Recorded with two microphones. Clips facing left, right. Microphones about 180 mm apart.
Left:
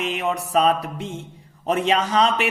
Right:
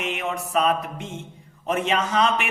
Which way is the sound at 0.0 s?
35° left (ahead or behind).